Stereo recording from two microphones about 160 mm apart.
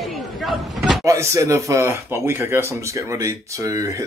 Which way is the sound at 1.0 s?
20° right (ahead or behind).